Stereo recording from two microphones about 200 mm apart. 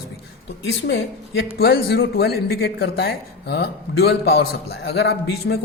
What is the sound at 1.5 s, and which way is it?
A man's voice, 50° left (ahead or behind).